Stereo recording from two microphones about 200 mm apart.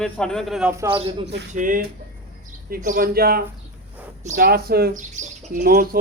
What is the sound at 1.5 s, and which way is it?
A man's voice, 40° right (ahead or behind).